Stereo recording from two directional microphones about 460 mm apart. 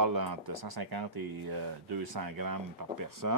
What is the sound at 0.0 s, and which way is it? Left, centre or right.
Speech, right.